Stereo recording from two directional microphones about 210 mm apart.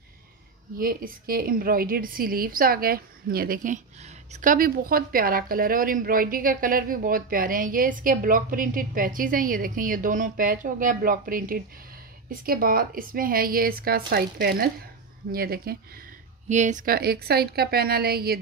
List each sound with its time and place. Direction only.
0.7 s a woman's voice: 45° right (ahead or behind)
16.4 s a woman's voice: 35° right (ahead or behind)